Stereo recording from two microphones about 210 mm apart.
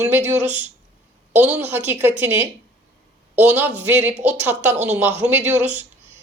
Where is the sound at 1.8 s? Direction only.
10° right (ahead or behind).